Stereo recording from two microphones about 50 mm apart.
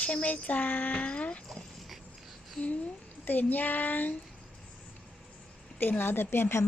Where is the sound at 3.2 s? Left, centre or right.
Left.